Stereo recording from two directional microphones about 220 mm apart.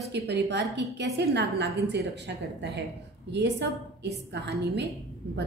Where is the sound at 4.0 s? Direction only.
50° right (ahead or behind).